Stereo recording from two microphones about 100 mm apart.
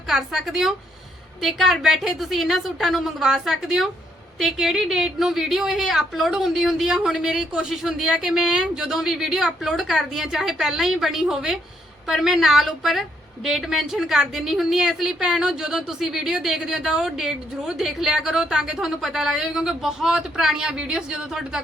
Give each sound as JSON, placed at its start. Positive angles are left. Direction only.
{"t": 0.1, "sound": "a woman's voice", "side_deg": 0}